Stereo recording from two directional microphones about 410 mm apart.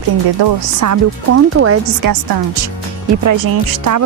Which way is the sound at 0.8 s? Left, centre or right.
Right.